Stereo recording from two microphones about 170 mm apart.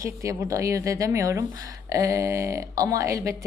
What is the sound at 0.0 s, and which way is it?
A woman's voice, 20° right (ahead or behind).